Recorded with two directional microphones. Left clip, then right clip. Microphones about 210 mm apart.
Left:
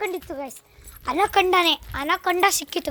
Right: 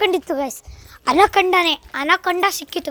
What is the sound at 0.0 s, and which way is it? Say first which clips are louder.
Speech: right 10 dB; 35° right (ahead or behind).